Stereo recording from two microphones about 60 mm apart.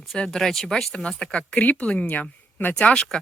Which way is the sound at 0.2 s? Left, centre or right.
Centre.